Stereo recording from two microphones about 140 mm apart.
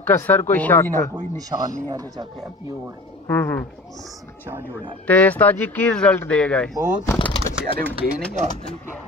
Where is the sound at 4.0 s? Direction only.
15° right (ahead or behind).